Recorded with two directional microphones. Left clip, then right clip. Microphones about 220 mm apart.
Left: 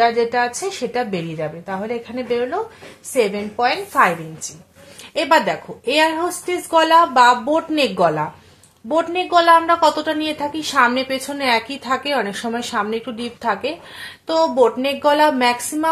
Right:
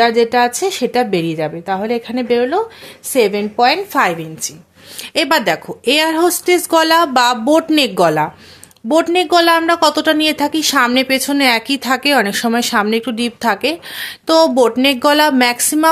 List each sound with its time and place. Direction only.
0.0 s a woman's voice: 50° right (ahead or behind)